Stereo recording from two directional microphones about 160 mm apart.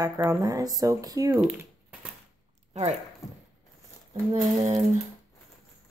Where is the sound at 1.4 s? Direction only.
10° right (ahead or behind).